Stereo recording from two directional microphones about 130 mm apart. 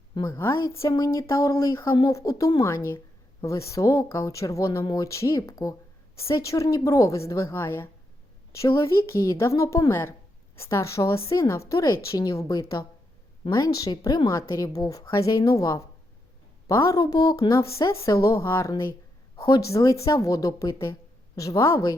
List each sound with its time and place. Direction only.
0.3 s speech: 20° left (ahead or behind)